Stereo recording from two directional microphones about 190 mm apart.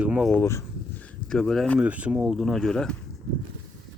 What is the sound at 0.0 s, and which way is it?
Speech, 5° right (ahead or behind).